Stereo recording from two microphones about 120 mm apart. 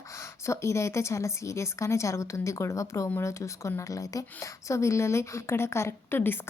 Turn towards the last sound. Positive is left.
turn(degrees=20)  # may be behind; listen again after turning